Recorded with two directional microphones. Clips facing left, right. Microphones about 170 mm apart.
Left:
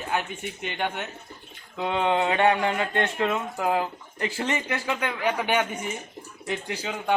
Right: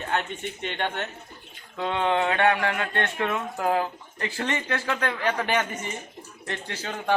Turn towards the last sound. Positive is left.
turn(degrees=10)  # may be behind; listen again after turning